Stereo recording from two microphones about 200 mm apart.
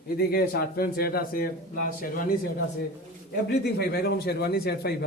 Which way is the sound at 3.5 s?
50° left (ahead or behind).